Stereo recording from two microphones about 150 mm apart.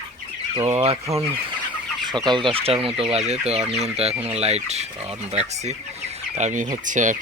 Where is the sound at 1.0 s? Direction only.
20° right (ahead or behind).